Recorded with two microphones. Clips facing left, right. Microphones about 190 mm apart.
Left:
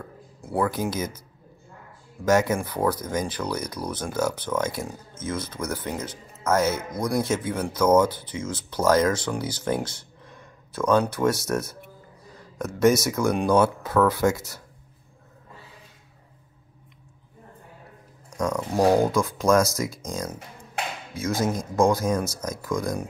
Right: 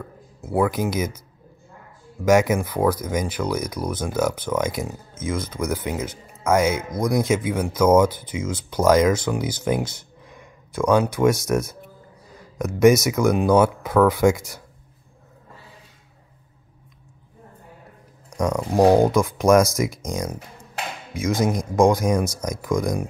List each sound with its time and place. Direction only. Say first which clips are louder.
0.4 s speech: right 4 dB; 10° right (ahead or behind)
2.2 s speech: right 4 dB; 10° right (ahead or behind)
18.6 s speech: right 4 dB; 20° right (ahead or behind)